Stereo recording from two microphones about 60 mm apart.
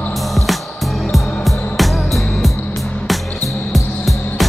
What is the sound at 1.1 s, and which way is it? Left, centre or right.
Music, centre.